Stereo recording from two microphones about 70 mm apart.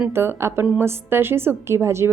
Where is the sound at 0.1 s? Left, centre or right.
Right.